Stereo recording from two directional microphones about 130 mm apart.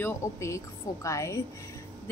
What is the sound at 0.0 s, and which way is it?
Speech, 25° left (ahead or behind).